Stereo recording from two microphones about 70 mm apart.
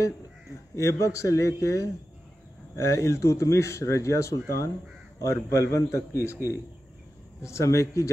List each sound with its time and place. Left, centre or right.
0.7 s speech: left
7.4 s speech: left